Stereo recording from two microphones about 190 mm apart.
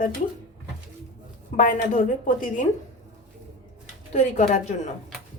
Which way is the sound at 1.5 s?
45° left (ahead or behind).